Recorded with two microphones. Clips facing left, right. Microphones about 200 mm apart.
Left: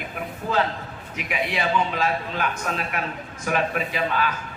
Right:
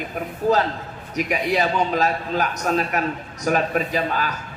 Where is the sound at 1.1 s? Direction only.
40° right (ahead or behind).